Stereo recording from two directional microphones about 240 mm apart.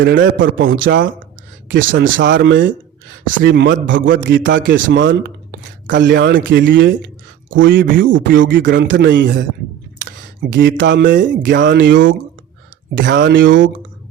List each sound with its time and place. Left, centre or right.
0.0 s speech: right
1.6 s speech: right
2.2 s speech: right
13.1 s speech: right